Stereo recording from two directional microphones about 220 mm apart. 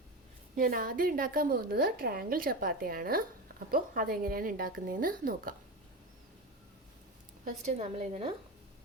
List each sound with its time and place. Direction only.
0.5 s a woman's voice: 40° right (ahead or behind)
7.4 s a woman's voice: 30° right (ahead or behind)